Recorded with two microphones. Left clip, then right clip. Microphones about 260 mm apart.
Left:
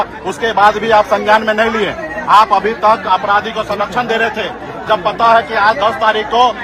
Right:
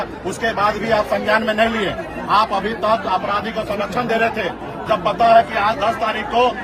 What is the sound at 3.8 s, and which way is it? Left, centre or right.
Speech, centre.